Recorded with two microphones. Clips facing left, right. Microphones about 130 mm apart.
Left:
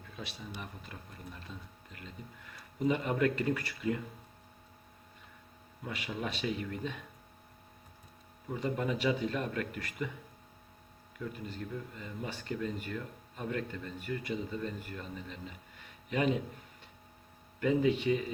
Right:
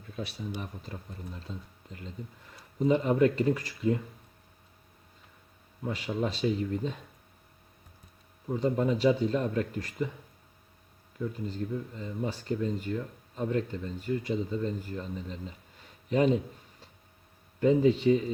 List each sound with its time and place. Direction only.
0.1 s speech: 45° right (ahead or behind)
5.8 s speech: 30° right (ahead or behind)
8.5 s speech: 30° right (ahead or behind)
11.2 s a man's voice: 30° right (ahead or behind)
17.6 s speech: 30° right (ahead or behind)